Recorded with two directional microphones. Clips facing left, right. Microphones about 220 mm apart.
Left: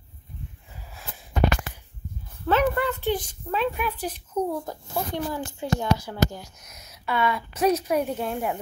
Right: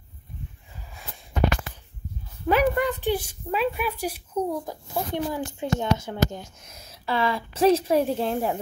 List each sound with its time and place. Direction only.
2.4 s a woman's voice: 15° right (ahead or behind); by 8.5 s 30° right (ahead or behind)